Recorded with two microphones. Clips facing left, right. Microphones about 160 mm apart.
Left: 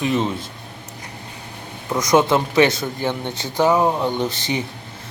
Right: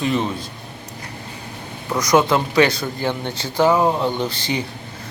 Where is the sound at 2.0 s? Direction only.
25° left (ahead or behind).